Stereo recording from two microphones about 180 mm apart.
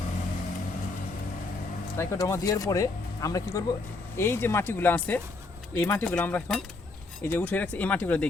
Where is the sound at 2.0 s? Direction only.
15° left (ahead or behind).